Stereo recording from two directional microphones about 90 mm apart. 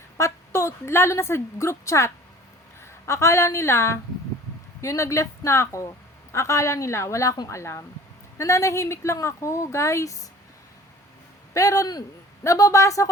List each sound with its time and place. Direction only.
0.2 s a woman's voice: 30° left (ahead or behind)
11.5 s a woman's voice: 40° left (ahead or behind)